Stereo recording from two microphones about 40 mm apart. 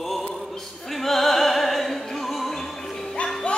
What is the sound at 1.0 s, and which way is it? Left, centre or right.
Music, centre.